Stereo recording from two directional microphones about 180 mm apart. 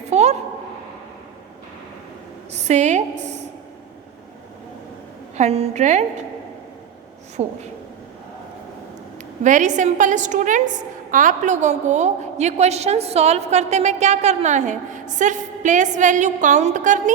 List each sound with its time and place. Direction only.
0.1 s a sound: 40° right (ahead or behind)
2.5 s a woman's voice: 40° right (ahead or behind)
5.4 s a woman's voice: 35° right (ahead or behind)
7.4 s a woman's voice: 35° right (ahead or behind)
9.4 s a woman's voice: 45° right (ahead or behind)